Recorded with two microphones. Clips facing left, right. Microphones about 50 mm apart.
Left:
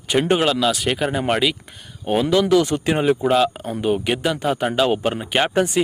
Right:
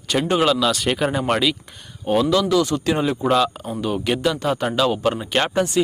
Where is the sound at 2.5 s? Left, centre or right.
Left.